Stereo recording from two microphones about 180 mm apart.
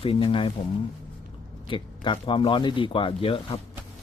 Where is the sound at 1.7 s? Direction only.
25° left (ahead or behind).